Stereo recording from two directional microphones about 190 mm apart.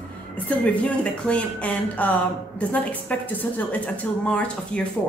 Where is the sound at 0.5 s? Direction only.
5° left (ahead or behind).